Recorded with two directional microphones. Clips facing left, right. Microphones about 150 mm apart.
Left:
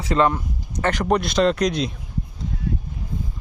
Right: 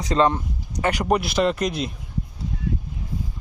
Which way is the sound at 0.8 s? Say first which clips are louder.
Left 1 dB; 10° right (ahead or behind).